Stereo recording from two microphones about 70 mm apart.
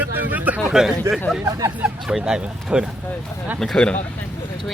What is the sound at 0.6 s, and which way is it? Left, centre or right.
Speech, centre.